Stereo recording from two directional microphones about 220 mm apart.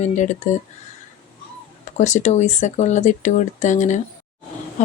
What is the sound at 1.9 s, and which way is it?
Speech, 30° left (ahead or behind).